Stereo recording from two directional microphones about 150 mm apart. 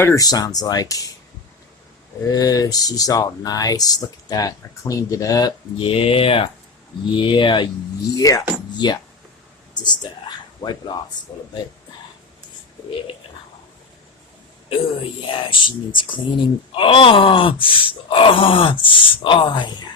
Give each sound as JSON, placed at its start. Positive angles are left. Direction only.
{"t": 0.0, "sound": "speech", "side_deg": 20}
{"t": 2.2, "sound": "speech", "side_deg": 25}
{"t": 15.2, "sound": "speech", "side_deg": 35}